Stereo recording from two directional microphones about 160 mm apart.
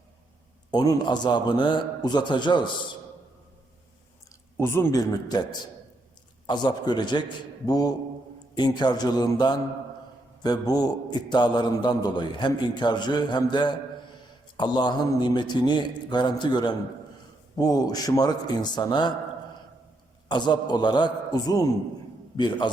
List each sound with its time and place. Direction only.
0.7 s a man's voice: 25° left (ahead or behind)
4.5 s a man's voice: 15° left (ahead or behind)
20.2 s a man's voice: 30° left (ahead or behind)